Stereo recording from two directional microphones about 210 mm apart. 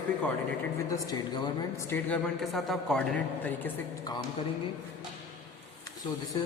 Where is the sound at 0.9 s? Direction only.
20° left (ahead or behind).